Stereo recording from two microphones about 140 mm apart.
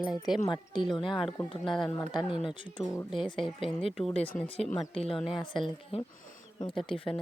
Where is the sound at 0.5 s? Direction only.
35° left (ahead or behind).